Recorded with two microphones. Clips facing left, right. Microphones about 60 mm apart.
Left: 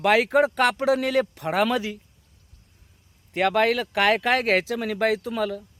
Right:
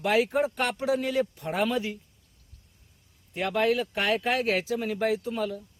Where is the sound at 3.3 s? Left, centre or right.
Left.